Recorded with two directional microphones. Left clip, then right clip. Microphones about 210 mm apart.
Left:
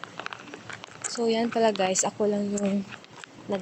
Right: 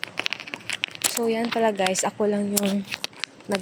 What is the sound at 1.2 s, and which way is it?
Speech, 5° right (ahead or behind).